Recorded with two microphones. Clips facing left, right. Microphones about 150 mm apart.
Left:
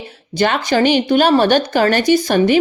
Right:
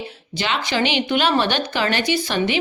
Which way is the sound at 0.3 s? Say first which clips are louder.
Left 7 dB; 50° left (ahead or behind).